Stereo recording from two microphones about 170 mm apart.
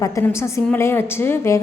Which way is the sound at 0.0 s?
15° left (ahead or behind).